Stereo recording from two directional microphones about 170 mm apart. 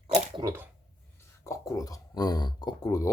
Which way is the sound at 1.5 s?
20° left (ahead or behind).